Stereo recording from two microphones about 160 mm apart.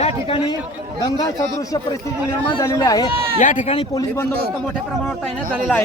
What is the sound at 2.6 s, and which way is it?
Speech, 20° left (ahead or behind).